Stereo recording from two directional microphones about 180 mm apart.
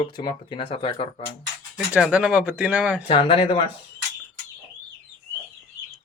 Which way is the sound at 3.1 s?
30° left (ahead or behind).